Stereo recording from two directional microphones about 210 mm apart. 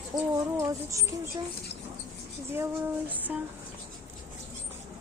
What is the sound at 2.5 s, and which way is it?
Speech, 10° right (ahead or behind).